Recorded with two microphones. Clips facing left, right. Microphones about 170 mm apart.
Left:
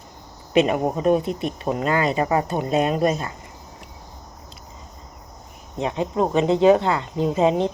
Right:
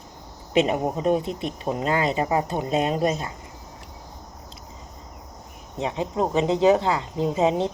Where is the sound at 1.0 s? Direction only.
20° right (ahead or behind).